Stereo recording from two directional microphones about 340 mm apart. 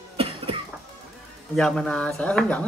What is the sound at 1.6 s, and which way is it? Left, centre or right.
Speech, centre.